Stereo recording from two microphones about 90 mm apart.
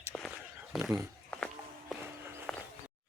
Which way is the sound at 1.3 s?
15° left (ahead or behind).